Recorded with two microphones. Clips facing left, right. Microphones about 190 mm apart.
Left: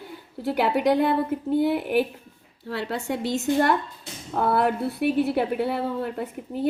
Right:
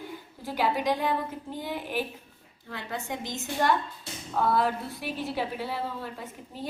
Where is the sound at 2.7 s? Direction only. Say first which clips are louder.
Left 7 dB; 70° left (ahead or behind).